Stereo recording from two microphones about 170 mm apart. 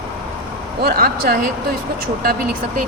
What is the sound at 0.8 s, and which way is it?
Speech, 60° right (ahead or behind).